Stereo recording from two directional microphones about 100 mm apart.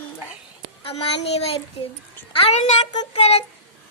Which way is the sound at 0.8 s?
80° left.